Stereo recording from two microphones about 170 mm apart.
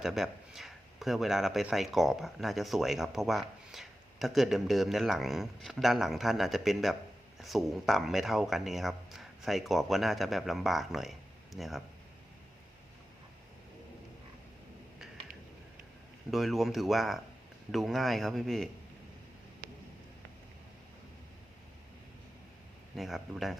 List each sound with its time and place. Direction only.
0.0 s speech: centre (ahead or behind)
16.3 s speech: centre (ahead or behind)
23.0 s speech: centre (ahead or behind)